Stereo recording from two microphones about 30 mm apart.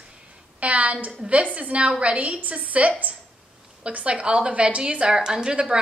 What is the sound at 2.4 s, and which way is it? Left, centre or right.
A woman's voice, right.